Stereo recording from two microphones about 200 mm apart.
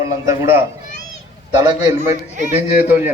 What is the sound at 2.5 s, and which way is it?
Speech, 10° right (ahead or behind).